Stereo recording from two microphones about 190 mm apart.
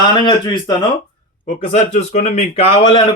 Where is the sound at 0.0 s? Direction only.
25° left (ahead or behind).